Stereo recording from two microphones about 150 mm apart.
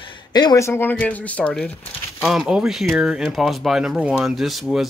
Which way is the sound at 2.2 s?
5° right (ahead or behind).